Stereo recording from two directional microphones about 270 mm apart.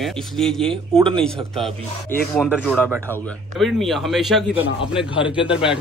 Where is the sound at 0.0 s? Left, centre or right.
Centre.